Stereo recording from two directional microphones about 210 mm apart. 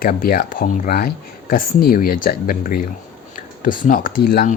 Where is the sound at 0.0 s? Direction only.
45° left (ahead or behind).